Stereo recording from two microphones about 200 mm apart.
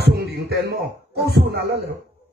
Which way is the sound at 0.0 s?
55° right (ahead or behind).